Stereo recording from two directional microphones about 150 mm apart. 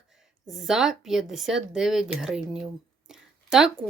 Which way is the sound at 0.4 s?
Centre (ahead or behind).